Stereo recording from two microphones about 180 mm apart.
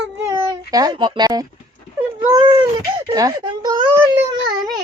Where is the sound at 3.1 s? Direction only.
20° right (ahead or behind).